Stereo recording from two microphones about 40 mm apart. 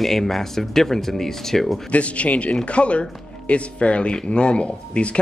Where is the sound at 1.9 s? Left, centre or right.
Left.